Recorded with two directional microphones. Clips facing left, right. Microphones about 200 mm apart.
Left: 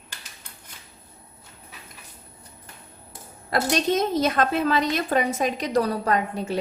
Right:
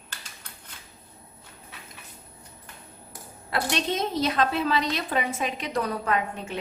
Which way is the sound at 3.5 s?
40° left (ahead or behind).